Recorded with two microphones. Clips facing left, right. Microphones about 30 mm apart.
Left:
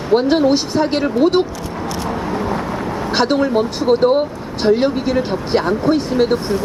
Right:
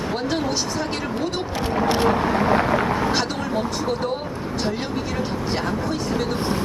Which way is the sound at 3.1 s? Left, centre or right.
Left.